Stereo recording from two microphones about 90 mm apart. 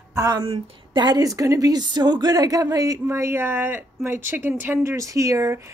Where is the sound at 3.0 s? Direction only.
30° right (ahead or behind).